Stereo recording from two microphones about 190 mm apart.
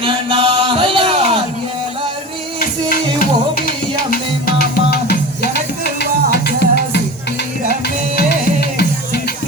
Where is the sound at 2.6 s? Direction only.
50° left (ahead or behind).